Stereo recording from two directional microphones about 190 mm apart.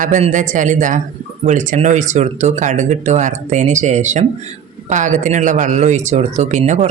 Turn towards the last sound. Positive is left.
turn(degrees=-40)  # may be behind; listen again after turning